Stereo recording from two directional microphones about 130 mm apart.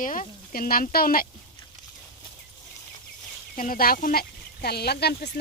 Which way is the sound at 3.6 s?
90° left.